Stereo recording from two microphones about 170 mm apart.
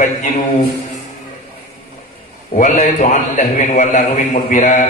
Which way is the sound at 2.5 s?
45° left (ahead or behind).